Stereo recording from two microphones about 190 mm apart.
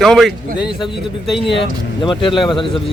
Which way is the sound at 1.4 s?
25° left (ahead or behind).